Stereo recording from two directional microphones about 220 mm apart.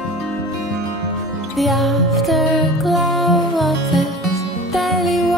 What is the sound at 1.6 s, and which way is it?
Music, centre (ahead or behind).